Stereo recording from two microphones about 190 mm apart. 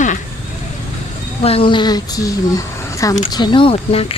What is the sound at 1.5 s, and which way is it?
Speech, 30° left (ahead or behind).